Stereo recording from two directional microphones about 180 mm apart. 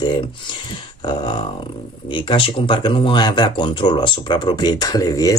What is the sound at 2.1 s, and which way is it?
Speech, 25° left (ahead or behind).